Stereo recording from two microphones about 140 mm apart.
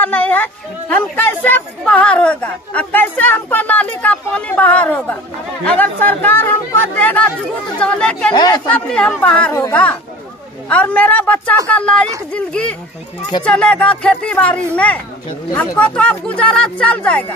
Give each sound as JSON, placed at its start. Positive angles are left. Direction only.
{"t": 0.0, "sound": "speech", "side_deg": 10}
{"t": 8.3, "sound": "speech", "side_deg": 30}
{"t": 8.6, "sound": "speech", "side_deg": 5}
{"t": 9.5, "sound": "a woman's voice", "side_deg": 20}
{"t": 10.7, "sound": "speech", "side_deg": 10}